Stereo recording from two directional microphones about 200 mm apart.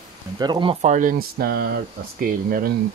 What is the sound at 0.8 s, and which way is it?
Speech, 40° right (ahead or behind).